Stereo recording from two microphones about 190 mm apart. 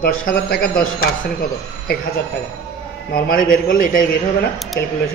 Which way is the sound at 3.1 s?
50° left (ahead or behind).